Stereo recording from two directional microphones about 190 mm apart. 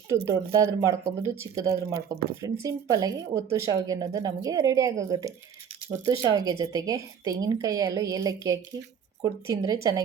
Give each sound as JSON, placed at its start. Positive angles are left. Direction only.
{"t": 0.3, "sound": "a woman's voice", "side_deg": -15}